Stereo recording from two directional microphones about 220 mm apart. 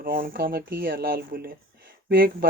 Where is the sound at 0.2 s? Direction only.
45° right (ahead or behind).